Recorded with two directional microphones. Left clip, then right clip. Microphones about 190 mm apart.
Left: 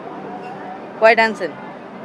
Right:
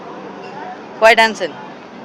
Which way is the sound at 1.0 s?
Centre (ahead or behind).